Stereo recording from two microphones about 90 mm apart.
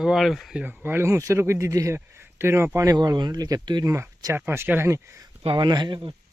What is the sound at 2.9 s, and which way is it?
Speech, 45° right (ahead or behind).